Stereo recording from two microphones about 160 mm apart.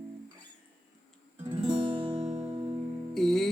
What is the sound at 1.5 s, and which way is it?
Music, 30° right (ahead or behind).